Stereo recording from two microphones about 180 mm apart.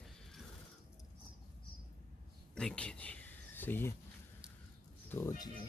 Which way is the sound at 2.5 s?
5° left (ahead or behind).